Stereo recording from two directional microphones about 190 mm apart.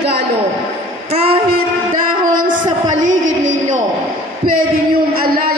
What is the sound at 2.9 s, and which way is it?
Music, 40° right (ahead or behind).